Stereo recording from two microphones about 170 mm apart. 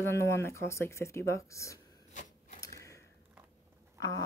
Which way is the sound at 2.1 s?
45° left (ahead or behind).